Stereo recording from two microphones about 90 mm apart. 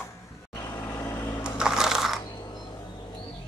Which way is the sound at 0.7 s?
25° left (ahead or behind).